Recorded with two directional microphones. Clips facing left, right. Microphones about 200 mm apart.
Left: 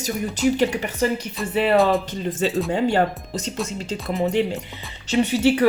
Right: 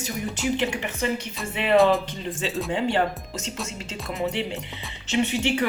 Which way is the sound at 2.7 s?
40° left (ahead or behind).